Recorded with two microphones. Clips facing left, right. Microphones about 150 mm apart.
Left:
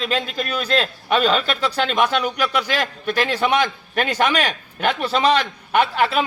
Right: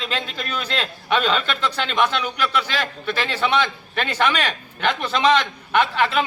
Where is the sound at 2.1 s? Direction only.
45° left (ahead or behind).